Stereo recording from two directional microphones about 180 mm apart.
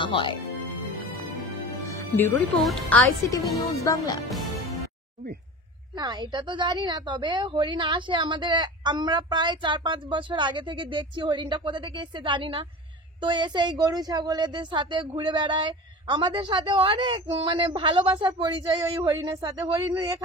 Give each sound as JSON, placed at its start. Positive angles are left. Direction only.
{"t": 0.0, "sound": "speech", "side_deg": 30}
{"t": 1.9, "sound": "music", "side_deg": 10}
{"t": 2.6, "sound": "speech", "side_deg": 0}
{"t": 3.3, "sound": "speech", "side_deg": 20}
{"t": 5.9, "sound": "a woman's voice", "side_deg": -20}